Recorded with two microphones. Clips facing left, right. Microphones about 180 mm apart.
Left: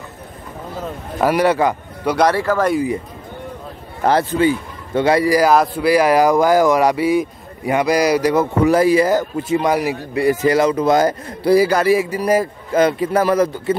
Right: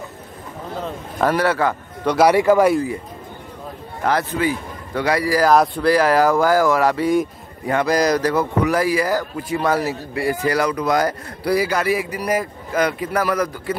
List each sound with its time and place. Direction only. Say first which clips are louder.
0.8 s speech: left 2 dB; 10° left (ahead or behind)
2.1 s speech: right 3 dB; 15° right (ahead or behind)
4.0 s speech: left 5 dB; 30° left (ahead or behind)
5.5 s speech: left 1 dB; 5° left (ahead or behind)
8.6 s speech: left 5 dB; 25° left (ahead or behind)